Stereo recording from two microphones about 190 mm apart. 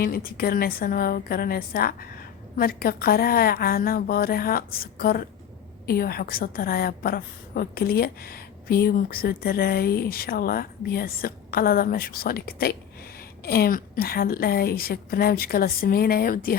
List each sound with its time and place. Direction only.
0.0 s a woman's voice: 50° left (ahead or behind)